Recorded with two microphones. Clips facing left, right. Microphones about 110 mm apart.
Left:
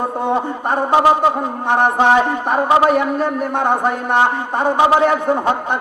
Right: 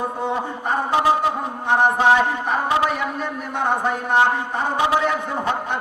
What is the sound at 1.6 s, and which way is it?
A man's voice, 55° left (ahead or behind).